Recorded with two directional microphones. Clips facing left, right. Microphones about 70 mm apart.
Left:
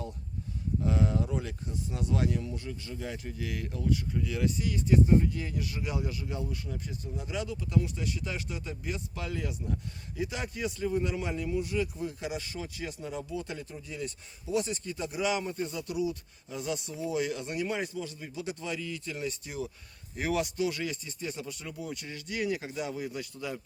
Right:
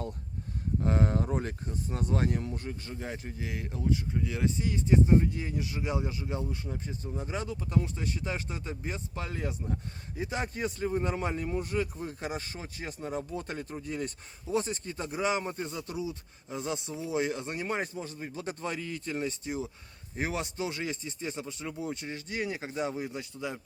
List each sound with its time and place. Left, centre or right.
0.8 s speech: right